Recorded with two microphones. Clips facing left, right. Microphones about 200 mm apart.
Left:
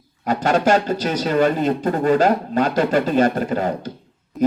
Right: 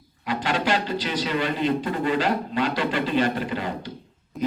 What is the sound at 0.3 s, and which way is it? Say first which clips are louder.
Speech: left 7 dB; 45° left (ahead or behind).